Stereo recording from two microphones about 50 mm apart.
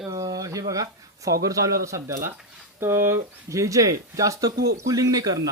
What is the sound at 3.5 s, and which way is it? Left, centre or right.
Speech, right.